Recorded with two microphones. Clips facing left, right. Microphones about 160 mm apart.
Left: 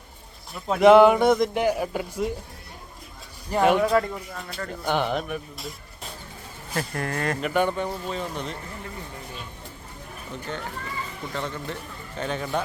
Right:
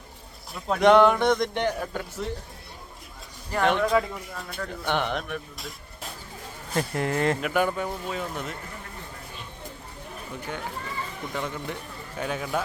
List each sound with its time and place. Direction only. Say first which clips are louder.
0.5 s speech: left 3 dB; 5° left (ahead or behind)
3.5 s speech: left 3 dB; 10° left (ahead or behind)
6.7 s speech: right 3 dB; 20° right (ahead or behind)
7.4 s speech: left 1 dB; 5° right (ahead or behind)
10.4 s a man's voice: left 1 dB; 10° right (ahead or behind)